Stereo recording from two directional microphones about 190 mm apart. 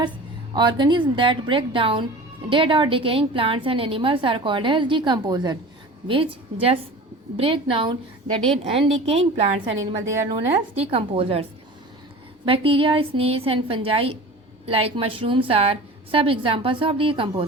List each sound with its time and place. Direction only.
0.5 s a woman's voice: 25° right (ahead or behind)
10.1 s a woman's voice: 15° right (ahead or behind)
10.5 s a woman's voice: 30° right (ahead or behind)
12.5 s a woman's voice: 30° right (ahead or behind)